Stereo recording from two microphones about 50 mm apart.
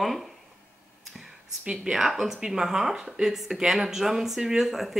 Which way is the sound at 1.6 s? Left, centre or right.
Centre.